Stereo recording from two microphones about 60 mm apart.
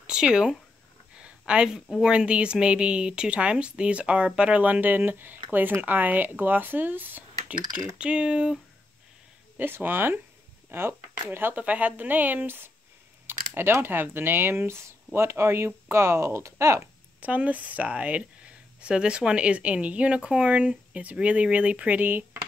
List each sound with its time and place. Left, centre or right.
0.0 s speech: centre
1.1 s a sound: centre
1.9 s speech: centre; by 7.5 s right
8.0 s speech: centre
9.6 s speech: right
11.5 s speech: right
17.2 s speech: right
22.0 s speech: right